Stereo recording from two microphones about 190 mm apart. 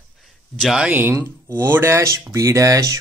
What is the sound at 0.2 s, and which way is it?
Speech, centre (ahead or behind).